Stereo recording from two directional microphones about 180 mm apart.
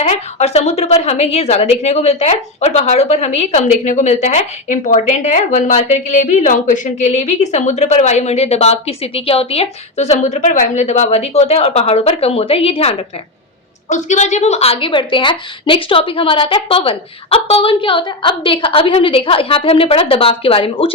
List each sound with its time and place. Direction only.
0.0 s a woman's voice: 35° left (ahead or behind)